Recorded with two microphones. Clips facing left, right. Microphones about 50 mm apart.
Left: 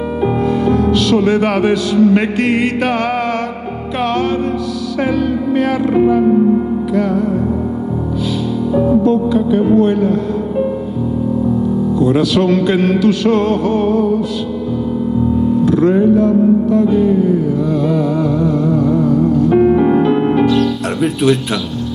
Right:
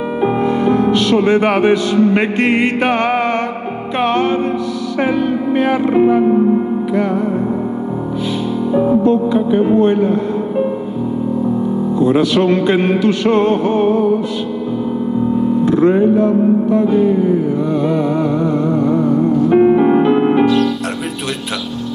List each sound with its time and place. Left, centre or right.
0.2 s music: right
8.7 s music: right
12.0 s music: right
15.6 s music: right
17.8 s a sound: right
19.0 s music: right
20.4 s music: centre